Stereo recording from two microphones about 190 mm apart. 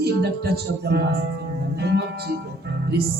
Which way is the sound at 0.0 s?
60° right (ahead or behind).